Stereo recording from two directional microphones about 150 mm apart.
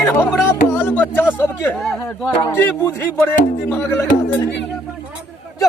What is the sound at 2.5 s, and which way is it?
A man's voice, 15° left (ahead or behind).